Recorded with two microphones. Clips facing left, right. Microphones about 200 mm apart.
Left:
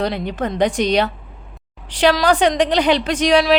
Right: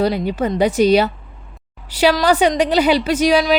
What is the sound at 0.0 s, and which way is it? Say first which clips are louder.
Speech: right 4 dB; 5° right (ahead or behind).